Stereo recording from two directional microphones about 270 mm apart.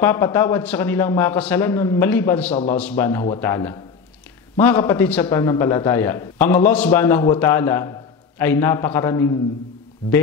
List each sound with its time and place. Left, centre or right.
0.0 s a man's voice: centre